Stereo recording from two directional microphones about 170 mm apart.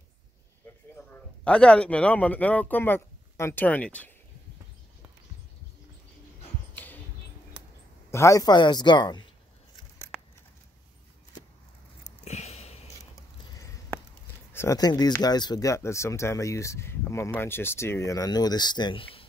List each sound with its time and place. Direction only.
1.1 s a man's voice: 5° left (ahead or behind)
6.7 s basketball bounce: 10° left (ahead or behind)
8.1 s speech: 15° left (ahead or behind)
12.0 s a sound: 40° left (ahead or behind)
13.6 s speech: 15° left (ahead or behind); by 19.2 s 30° left (ahead or behind)